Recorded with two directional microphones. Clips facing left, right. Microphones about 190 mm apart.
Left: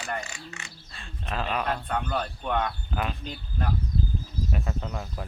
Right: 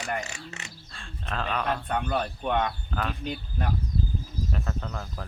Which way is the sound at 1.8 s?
10° right (ahead or behind).